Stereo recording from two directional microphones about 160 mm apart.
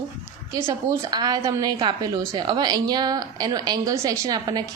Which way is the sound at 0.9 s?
25° right (ahead or behind).